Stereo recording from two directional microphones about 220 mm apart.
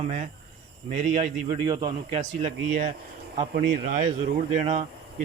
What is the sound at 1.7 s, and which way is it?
Speech, 20° right (ahead or behind).